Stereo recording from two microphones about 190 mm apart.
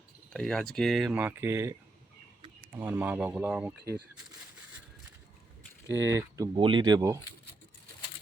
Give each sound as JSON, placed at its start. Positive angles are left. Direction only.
{"t": 0.3, "sound": "speech", "side_deg": 5}
{"t": 2.7, "sound": "speech", "side_deg": -10}
{"t": 6.0, "sound": "speech", "side_deg": -15}